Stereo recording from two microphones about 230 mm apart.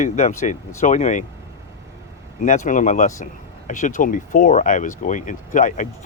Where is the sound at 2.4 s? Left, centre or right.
Left.